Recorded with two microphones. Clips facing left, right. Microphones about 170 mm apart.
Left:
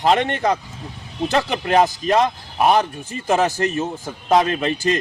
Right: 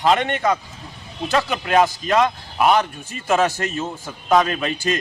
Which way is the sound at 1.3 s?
30° left (ahead or behind).